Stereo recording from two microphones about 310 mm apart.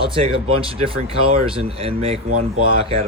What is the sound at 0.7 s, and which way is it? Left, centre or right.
Speech, centre.